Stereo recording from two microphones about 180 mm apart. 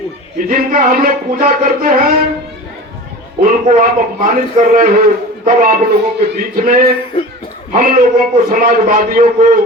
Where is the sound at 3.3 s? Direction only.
50° right (ahead or behind).